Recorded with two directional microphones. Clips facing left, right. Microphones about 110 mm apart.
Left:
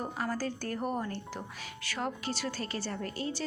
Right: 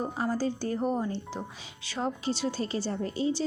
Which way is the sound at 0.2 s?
20° right (ahead or behind).